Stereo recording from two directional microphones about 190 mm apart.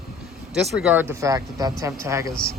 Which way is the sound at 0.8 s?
10° right (ahead or behind).